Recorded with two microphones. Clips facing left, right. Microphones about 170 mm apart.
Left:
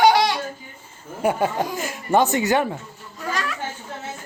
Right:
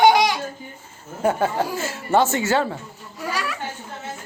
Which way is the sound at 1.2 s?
15° left (ahead or behind).